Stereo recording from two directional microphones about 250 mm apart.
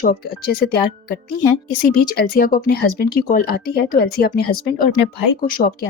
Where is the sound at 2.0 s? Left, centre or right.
Left.